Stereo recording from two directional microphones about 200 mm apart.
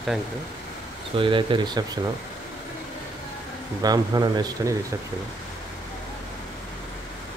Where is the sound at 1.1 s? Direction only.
25° right (ahead or behind).